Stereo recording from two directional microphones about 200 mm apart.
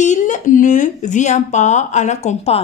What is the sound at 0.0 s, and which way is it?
Speech, 40° left (ahead or behind).